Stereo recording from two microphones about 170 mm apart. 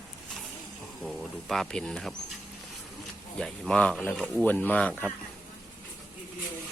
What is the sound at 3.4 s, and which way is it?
Speech, 5° left (ahead or behind).